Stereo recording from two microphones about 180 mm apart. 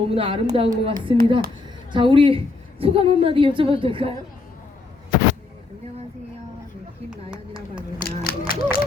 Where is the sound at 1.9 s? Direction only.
30° right (ahead or behind).